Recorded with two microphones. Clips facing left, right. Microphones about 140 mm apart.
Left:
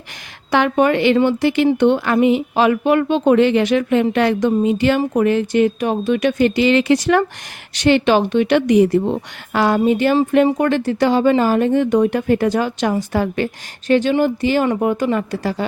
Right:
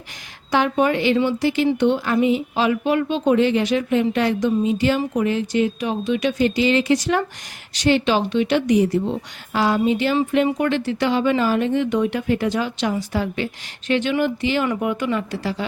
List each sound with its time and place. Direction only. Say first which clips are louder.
0.5 s a woman's voice: left 3 dB; 65° left (ahead or behind); by 15.6 s 45° left (ahead or behind)